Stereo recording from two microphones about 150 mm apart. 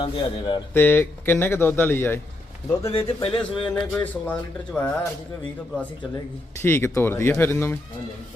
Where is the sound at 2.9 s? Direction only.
40° left (ahead or behind).